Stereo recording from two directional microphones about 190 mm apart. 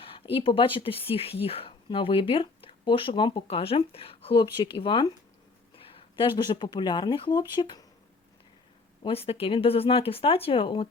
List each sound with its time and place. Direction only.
0.0 s speech: 30° left (ahead or behind)
9.0 s speech: 30° left (ahead or behind)